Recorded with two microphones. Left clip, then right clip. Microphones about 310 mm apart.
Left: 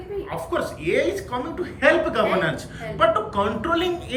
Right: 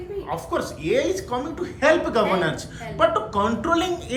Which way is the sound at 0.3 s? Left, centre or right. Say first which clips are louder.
Even; centre.